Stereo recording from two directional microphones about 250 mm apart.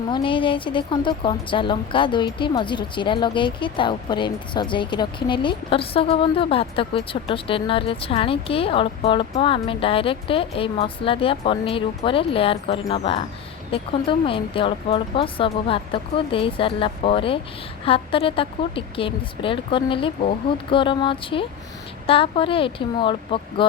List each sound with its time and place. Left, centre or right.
0.1 s a woman's voice: centre